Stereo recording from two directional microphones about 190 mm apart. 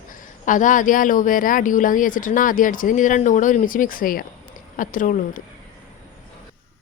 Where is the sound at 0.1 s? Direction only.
45° left (ahead or behind).